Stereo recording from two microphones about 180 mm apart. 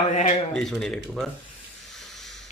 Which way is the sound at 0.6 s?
5° left (ahead or behind).